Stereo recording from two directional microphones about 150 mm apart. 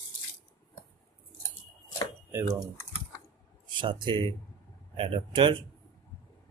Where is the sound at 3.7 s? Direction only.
35° right (ahead or behind).